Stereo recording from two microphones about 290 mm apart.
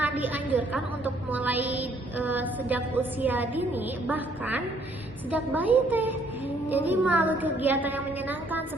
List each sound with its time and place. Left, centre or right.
0.0 s a woman's voice: centre